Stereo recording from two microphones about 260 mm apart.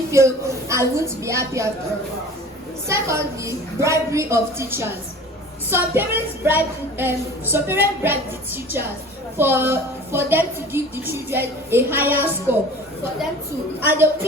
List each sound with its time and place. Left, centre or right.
0.1 s a woman's voice: centre
2.8 s a woman's voice: centre
9.4 s a woman's voice: centre
13.8 s a woman's voice: centre